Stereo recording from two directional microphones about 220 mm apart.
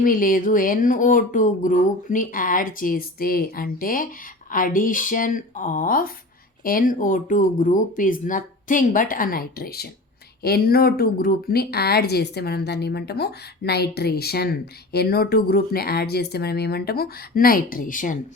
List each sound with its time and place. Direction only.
0.0 s speech: 40° left (ahead or behind)